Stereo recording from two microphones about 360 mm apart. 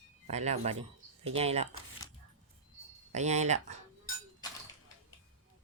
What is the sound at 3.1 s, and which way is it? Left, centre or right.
Speech, centre.